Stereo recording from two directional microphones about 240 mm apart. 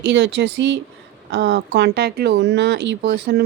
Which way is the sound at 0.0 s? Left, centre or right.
Right.